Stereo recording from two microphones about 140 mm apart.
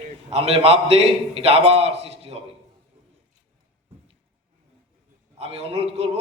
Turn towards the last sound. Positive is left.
turn(degrees=-45)  # may be behind; listen again after turning